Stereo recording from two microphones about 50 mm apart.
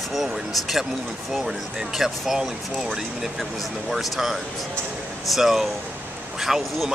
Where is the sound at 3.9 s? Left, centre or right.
Centre.